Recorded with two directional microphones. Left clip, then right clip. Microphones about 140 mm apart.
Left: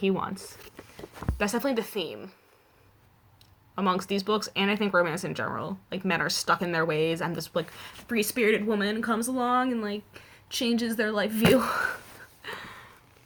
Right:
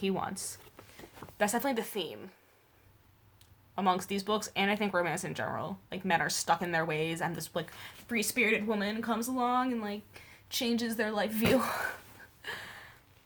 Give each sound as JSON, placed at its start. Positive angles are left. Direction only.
{"t": 0.0, "sound": "speech", "side_deg": -30}
{"t": 3.8, "sound": "speech", "side_deg": -25}
{"t": 12.4, "sound": "a sound", "side_deg": -25}